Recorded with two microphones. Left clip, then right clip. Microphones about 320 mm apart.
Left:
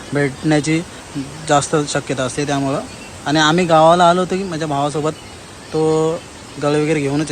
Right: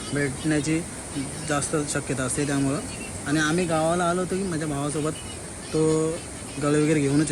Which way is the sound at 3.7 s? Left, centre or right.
Left.